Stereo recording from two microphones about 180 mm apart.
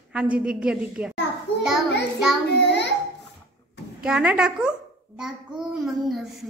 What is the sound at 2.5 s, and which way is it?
Child singing, 75° left (ahead or behind).